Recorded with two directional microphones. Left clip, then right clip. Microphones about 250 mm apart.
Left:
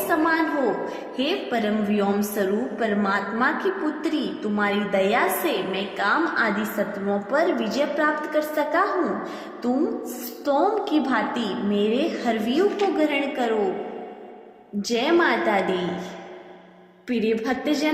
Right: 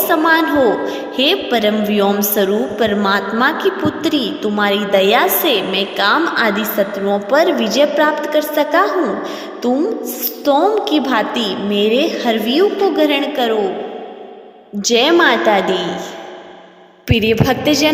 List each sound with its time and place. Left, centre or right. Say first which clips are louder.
0.1 s a woman's voice: right 9 dB; right
14.8 s a woman's voice: right 9 dB; right
17.1 s a woman's voice: right 9 dB; right